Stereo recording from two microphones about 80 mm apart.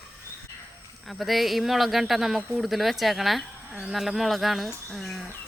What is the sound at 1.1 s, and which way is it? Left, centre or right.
Speech, centre.